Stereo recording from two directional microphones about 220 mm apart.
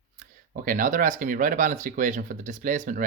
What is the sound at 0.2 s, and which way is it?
Speech, 40° right (ahead or behind).